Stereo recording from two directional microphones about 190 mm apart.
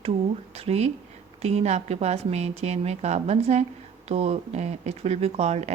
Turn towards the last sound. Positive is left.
turn(degrees=-35)  # may be behind; listen again after turning